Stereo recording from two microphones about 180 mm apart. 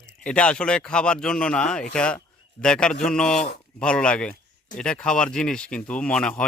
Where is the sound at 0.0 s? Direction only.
5° left (ahead or behind).